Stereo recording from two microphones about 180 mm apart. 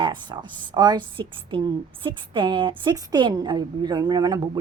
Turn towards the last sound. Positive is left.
turn(degrees=-25)  # may be behind; listen again after turning